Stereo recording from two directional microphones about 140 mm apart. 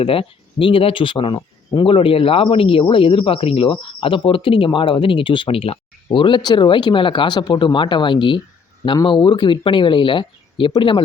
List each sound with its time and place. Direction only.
0.0 s speech: 40° left (ahead or behind)